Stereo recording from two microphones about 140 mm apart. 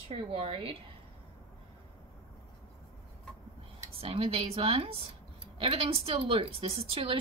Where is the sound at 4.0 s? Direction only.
40° right (ahead or behind).